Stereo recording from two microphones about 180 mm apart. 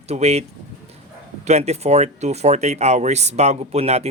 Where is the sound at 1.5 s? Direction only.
35° right (ahead or behind).